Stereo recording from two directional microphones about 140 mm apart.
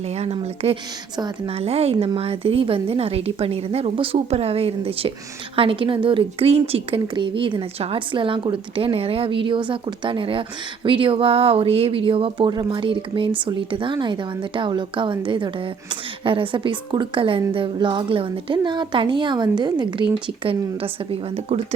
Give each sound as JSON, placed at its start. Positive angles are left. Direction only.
{"t": 0.1, "sound": "a woman's voice", "side_deg": -50}